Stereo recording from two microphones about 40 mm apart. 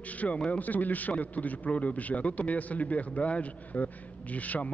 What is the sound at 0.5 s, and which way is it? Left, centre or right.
A man's voice, left.